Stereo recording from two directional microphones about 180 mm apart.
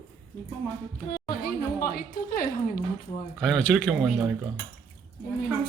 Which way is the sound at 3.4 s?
5° left (ahead or behind).